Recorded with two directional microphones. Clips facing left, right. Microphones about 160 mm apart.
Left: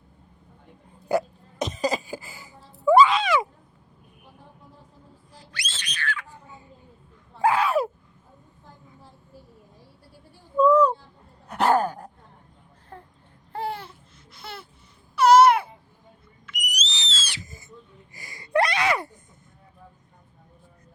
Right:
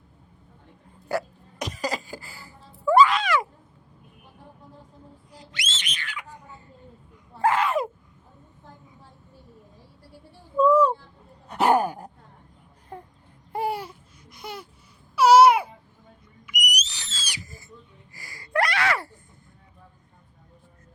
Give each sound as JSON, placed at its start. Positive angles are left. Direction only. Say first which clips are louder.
{"t": 1.0, "sound": "hiccup", "louder": "left 4 dB", "side_deg": 20}
{"t": 5.3, "sound": "whistle", "louder": "right 2 dB", "side_deg": -20}
{"t": 7.3, "sound": "a sound", "louder": "left 1 dB", "side_deg": 10}
{"t": 10.6, "sound": "a sound", "louder": "left 1 dB", "side_deg": -5}
{"t": 13.5, "sound": "babbling", "louder": "right 3 dB", "side_deg": -10}
{"t": 14.3, "sound": "a sound", "louder": "right 3 dB", "side_deg": -10}
{"t": 15.1, "sound": "babbling", "louder": "even", "side_deg": -10}
{"t": 16.5, "sound": "owl", "louder": "right 2 dB", "side_deg": -15}
{"t": 17.4, "sound": "owl", "louder": "even", "side_deg": 20}
{"t": 18.1, "sound": "gasp", "louder": "left 4 dB", "side_deg": 20}